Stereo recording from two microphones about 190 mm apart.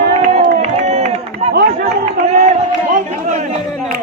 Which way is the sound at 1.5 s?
55° right (ahead or behind).